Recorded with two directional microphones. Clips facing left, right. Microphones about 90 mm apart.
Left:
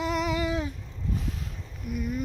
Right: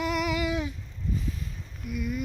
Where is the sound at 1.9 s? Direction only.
40° left (ahead or behind).